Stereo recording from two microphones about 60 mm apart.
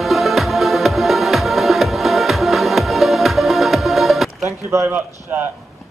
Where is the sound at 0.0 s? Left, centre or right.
Centre.